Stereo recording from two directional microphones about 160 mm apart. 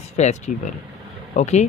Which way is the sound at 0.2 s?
45° left (ahead or behind).